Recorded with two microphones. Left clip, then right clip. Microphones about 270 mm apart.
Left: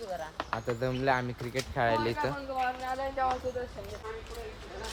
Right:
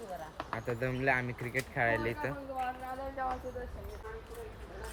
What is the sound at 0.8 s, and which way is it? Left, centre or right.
Speech, centre.